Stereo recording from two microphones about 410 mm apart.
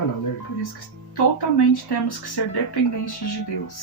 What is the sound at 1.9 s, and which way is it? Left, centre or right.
Speech, left.